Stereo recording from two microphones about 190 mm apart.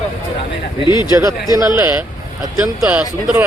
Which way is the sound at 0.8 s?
20° left (ahead or behind).